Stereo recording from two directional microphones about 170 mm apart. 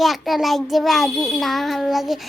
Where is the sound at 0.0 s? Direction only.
Centre (ahead or behind).